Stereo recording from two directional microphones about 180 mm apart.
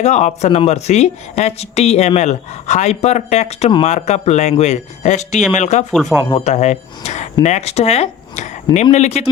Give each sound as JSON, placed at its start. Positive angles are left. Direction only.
{"t": 0.0, "sound": "speech", "side_deg": 40}
{"t": 5.9, "sound": "speech", "side_deg": 0}
{"t": 6.3, "sound": "speech", "side_deg": 40}